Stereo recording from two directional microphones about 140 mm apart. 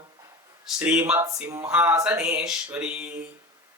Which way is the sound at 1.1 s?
20° right (ahead or behind).